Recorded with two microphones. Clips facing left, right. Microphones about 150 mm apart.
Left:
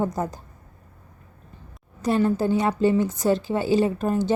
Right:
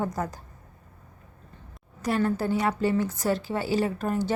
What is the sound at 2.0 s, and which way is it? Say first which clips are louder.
A woman's voice: left 4 dB; 20° left (ahead or behind).